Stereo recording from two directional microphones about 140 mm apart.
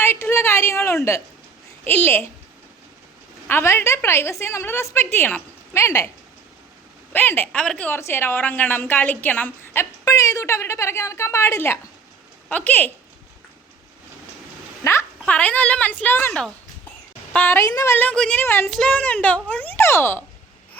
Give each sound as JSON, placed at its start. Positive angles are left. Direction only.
{"t": 0.0, "sound": "a woman's voice", "side_deg": 15}
{"t": 3.4, "sound": "a woman's voice", "side_deg": 20}
{"t": 7.1, "sound": "a woman's voice", "side_deg": 15}
{"t": 14.8, "sound": "a woman's voice", "side_deg": 20}
{"t": 15.3, "sound": "a woman's voice", "side_deg": 10}